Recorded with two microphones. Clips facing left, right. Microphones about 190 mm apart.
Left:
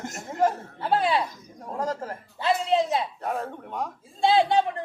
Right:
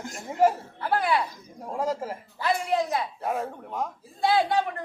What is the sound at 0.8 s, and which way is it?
Music, 25° left (ahead or behind).